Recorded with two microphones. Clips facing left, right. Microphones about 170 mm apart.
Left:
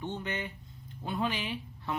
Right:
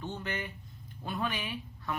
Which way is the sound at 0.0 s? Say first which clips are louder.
Left 1 dB; 20° left (ahead or behind).